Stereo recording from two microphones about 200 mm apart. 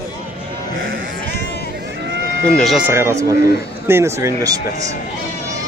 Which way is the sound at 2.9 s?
15° right (ahead or behind).